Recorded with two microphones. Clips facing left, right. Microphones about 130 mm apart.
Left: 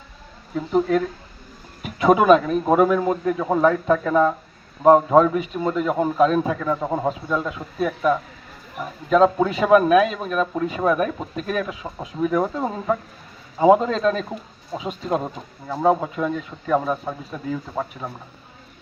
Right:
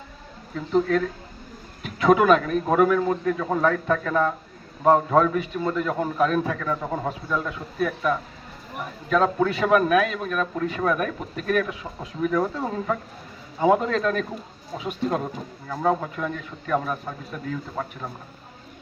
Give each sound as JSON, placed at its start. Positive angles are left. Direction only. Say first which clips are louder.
{"t": 0.5, "sound": "a man's voice", "louder": "left 2 dB", "side_deg": 15}